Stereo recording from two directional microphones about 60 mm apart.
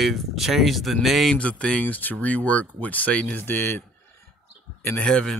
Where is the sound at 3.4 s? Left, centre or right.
Left.